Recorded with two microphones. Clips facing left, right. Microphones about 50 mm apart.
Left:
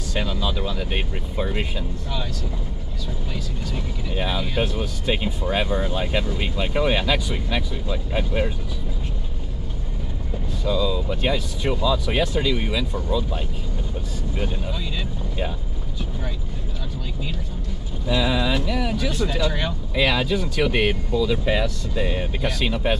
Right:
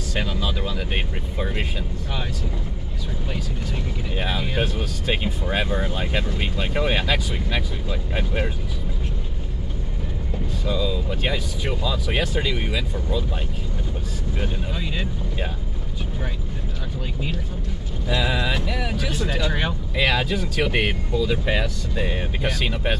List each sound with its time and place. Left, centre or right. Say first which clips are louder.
0.2 s speech: left 1 dB; centre
4.2 s speech: left 1 dB; centre
10.7 s speech: left 3 dB; centre
12.4 s speech: left 2 dB; right
14.8 s speech: right 1 dB; right
18.1 s speech: left 2 dB; right
20.2 s speech: left 1 dB; centre